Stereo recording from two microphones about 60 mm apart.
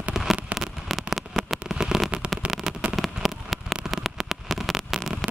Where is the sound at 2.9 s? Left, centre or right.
Centre.